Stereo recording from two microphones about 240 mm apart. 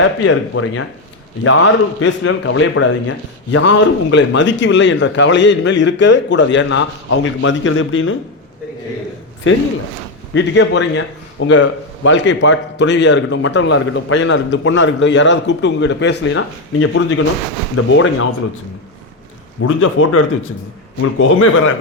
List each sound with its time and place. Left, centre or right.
0.0 s a man's voice: left
9.5 s a man's voice: left
19.6 s speech: left